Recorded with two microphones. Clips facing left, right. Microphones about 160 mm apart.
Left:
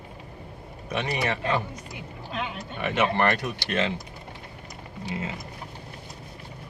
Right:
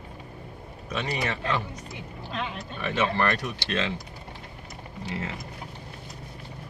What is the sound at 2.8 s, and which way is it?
Speech, 65° left (ahead or behind).